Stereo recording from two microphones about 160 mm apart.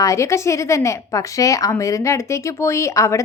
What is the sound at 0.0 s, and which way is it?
A woman's voice, 20° left (ahead or behind).